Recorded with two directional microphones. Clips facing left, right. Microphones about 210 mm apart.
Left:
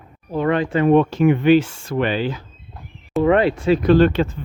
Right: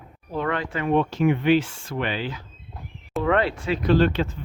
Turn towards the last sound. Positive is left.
turn(degrees=50)  # may be behind; listen again after turning